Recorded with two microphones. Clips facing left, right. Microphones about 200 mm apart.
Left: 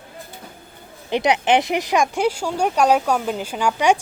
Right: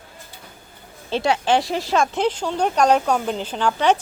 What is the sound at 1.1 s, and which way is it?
Speech, 20° left (ahead or behind).